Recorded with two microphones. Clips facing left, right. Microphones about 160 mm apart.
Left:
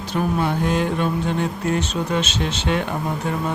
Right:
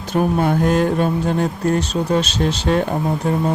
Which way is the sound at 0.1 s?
45° right (ahead or behind).